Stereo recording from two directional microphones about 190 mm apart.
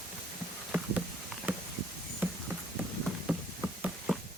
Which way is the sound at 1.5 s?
10° right (ahead or behind).